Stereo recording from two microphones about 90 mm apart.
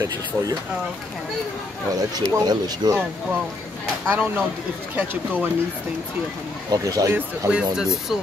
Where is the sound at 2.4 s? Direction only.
50° right (ahead or behind).